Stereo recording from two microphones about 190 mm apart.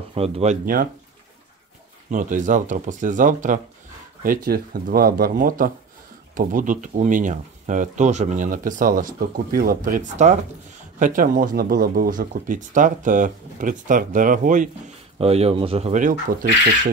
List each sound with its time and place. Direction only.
0.1 s speech: 35° right (ahead or behind)
2.0 s speech: 45° right (ahead or behind)
15.1 s speech: 30° right (ahead or behind)